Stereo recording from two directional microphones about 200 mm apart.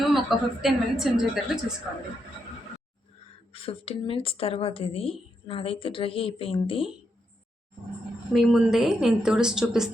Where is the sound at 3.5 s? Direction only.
30° left (ahead or behind).